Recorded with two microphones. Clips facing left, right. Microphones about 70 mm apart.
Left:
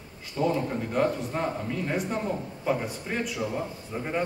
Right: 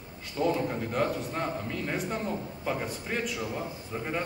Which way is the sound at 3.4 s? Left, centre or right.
Centre.